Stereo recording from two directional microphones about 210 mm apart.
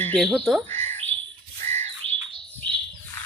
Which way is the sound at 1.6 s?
30° right (ahead or behind).